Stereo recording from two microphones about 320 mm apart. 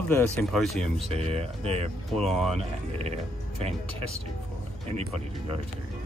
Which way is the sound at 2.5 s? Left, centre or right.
Centre.